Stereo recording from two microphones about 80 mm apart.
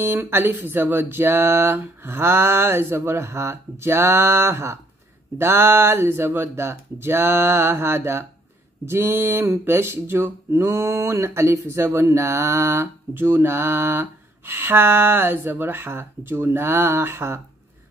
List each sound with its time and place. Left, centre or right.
0.0 s speech: right